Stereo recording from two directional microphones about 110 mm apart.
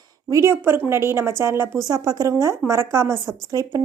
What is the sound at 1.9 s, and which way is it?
A woman's voice, 35° right (ahead or behind).